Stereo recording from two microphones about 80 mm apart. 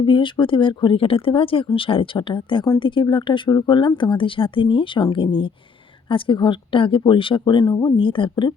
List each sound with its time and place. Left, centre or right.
0.0 s speech: left
7.6 s speech: left
7.9 s speech: left